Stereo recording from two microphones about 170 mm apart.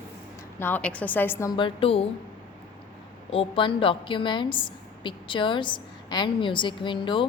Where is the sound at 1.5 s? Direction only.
30° left (ahead or behind).